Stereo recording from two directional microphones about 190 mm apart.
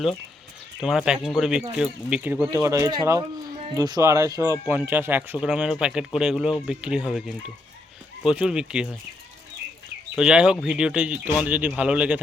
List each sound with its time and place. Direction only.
0.8 s speech: centre (ahead or behind)
10.2 s speech: 5° right (ahead or behind)